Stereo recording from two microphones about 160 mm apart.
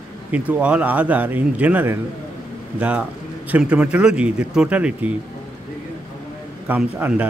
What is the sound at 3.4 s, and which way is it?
Speech, 10° right (ahead or behind).